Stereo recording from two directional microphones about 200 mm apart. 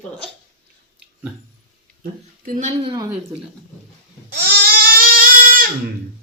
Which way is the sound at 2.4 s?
40° right (ahead or behind).